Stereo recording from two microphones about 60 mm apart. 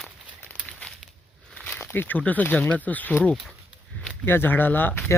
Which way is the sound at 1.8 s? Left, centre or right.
Left.